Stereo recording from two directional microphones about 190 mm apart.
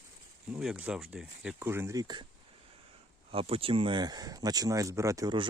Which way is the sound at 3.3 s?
30° right (ahead or behind).